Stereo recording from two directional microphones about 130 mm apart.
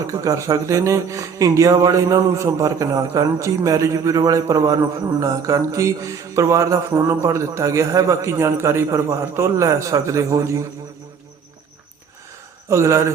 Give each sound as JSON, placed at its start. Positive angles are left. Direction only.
{"t": 0.1, "sound": "speech", "side_deg": -25}
{"t": 12.6, "sound": "speech", "side_deg": -25}